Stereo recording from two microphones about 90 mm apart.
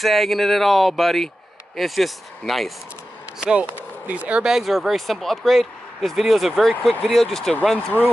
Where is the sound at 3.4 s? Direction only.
10° right (ahead or behind).